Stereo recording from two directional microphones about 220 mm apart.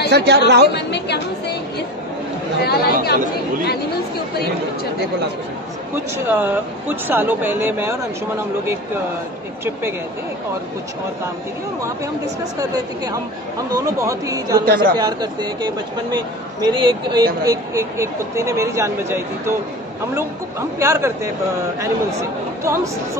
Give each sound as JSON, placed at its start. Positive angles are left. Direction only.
{"t": 0.1, "sound": "a woman's voice", "side_deg": -50}
{"t": 0.7, "sound": "speech", "side_deg": 50}
{"t": 2.6, "sound": "speech", "side_deg": 45}
{"t": 6.2, "sound": "speech", "side_deg": -10}
{"t": 12.5, "sound": "speech", "side_deg": -15}
{"t": 14.6, "sound": "speech", "side_deg": -40}
{"t": 16.8, "sound": "speech", "side_deg": -20}
{"t": 20.8, "sound": "speech", "side_deg": -10}